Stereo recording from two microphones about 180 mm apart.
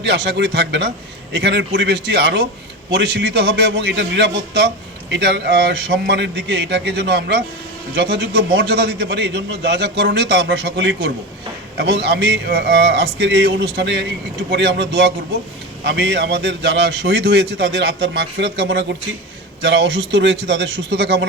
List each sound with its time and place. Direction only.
0.0 s a man's voice: 70° right (ahead or behind)